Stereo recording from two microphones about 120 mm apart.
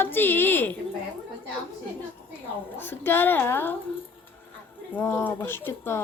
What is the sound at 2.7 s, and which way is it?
Speech, 15° left (ahead or behind).